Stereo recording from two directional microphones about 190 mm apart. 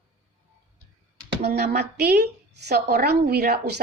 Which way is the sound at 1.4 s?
55° right (ahead or behind).